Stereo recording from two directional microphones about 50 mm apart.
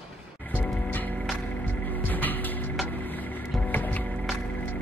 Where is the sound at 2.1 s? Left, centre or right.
Left.